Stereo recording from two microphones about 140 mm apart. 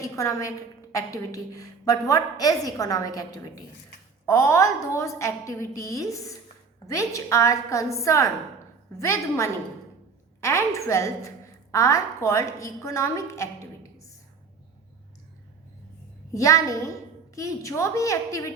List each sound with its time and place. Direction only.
0.0 s a woman's voice: 20° left (ahead or behind)
10.8 s a woman's voice: 20° left (ahead or behind)
16.3 s a woman's voice: 20° left (ahead or behind)